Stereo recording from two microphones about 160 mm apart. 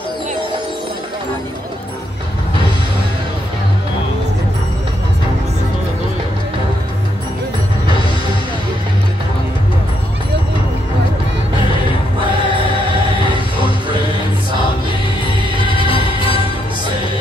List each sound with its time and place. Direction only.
13.6 s music: 30° right (ahead or behind)
15.8 s music: 30° left (ahead or behind)